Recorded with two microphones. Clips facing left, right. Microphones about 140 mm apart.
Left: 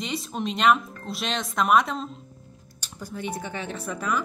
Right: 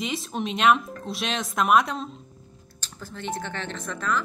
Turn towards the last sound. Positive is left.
turn(degrees=10)  # may be behind; listen again after turning